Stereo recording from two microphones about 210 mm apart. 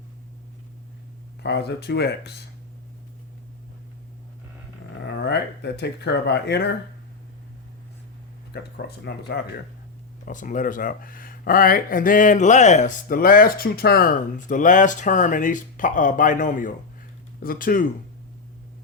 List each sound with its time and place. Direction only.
1.4 s speech: 50° left (ahead or behind)
5.0 s speech: 50° left (ahead or behind)
8.5 s speech: 50° left (ahead or behind)
10.2 s speech: 40° left (ahead or behind)